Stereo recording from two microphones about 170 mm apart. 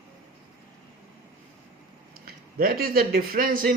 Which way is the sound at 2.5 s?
60° right (ahead or behind).